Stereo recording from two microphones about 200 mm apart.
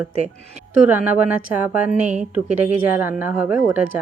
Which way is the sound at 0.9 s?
10° right (ahead or behind).